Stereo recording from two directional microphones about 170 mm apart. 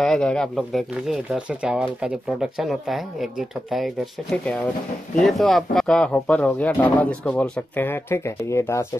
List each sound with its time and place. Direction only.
0.0 s speech: 5° left (ahead or behind)